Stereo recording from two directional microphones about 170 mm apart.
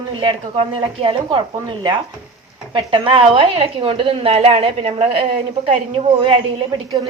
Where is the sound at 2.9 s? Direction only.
30° right (ahead or behind).